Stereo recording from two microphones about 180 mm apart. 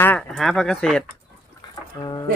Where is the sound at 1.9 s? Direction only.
25° left (ahead or behind).